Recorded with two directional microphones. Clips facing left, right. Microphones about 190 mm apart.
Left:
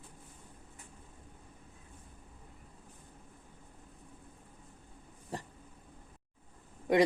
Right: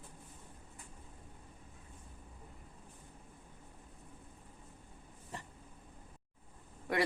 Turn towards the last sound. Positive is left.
turn(degrees=20)  # may be behind; listen again after turning